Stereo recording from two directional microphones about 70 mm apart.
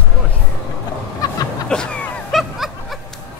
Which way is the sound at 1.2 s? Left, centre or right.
Left.